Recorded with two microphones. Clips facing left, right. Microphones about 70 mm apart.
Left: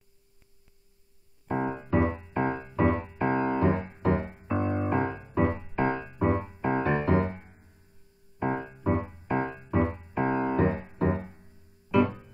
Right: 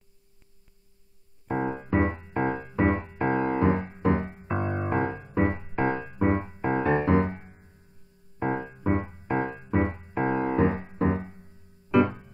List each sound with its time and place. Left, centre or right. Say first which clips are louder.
1.6 s music: right 2 dB; centre
1.9 s music: even; right
2.8 s music: right 1 dB; right
4.3 s music: left 1 dB; right
5.3 s music: right 1 dB; right
5.6 s music: right 1 dB; right
8.5 s music: right 1 dB; centre
8.8 s music: right 1 dB; right